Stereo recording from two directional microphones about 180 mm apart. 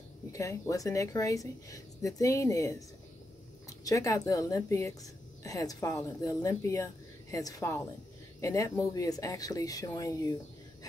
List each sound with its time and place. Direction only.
0.3 s speech: 15° left (ahead or behind)
3.8 s a woman's voice: 20° left (ahead or behind)